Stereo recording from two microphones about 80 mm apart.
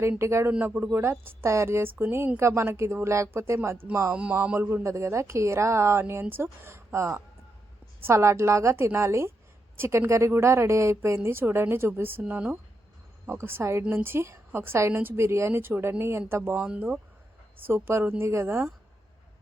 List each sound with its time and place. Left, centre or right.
0.2 s a woman's voice: right
4.1 s speech: centre
4.7 s a woman's voice: right; by 12.5 s centre
13.2 s a woman's voice: right
16.6 s speech: centre
17.6 s a woman's voice: right